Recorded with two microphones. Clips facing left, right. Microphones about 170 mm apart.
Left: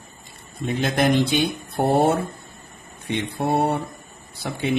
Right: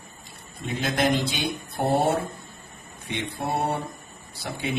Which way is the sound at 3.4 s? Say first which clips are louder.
Left 6 dB; 60° left (ahead or behind).